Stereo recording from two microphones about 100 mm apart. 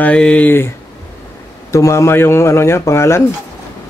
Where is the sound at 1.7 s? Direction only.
30° left (ahead or behind).